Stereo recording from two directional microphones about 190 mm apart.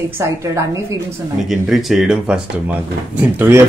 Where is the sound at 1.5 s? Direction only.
Centre (ahead or behind).